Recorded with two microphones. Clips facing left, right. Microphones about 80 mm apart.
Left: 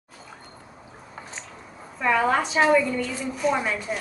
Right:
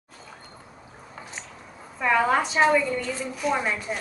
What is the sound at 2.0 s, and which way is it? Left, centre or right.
Speech, centre.